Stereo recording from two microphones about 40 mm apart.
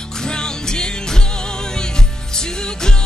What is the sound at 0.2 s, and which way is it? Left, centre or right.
Music, centre.